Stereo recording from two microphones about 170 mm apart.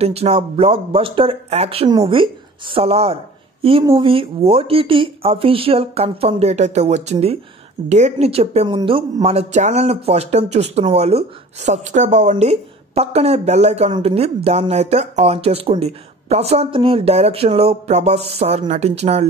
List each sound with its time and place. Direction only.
0.0 s speech: 35° right (ahead or behind)